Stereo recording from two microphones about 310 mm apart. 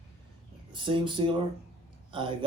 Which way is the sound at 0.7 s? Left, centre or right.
Centre.